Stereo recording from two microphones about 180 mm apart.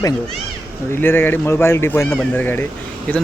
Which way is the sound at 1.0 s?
10° left (ahead or behind).